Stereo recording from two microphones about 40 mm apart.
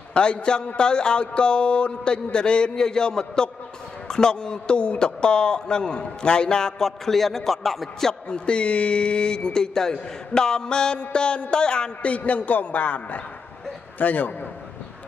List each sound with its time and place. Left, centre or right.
0.1 s speech: left; by 8.1 s centre
8.1 s a man's voice: left